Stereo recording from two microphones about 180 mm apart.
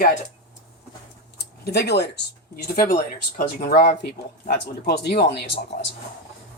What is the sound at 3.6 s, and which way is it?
Speech, 55° left (ahead or behind).